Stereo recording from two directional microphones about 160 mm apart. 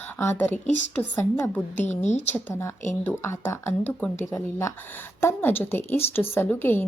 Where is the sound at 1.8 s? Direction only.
45° left (ahead or behind).